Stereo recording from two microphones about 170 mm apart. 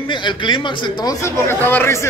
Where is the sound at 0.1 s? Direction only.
30° left (ahead or behind).